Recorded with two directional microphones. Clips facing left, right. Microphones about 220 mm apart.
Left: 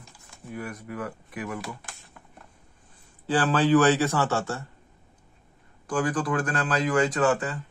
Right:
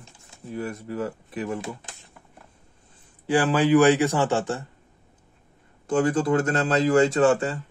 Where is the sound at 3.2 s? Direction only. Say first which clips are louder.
Right 2 dB; 10° right (ahead or behind).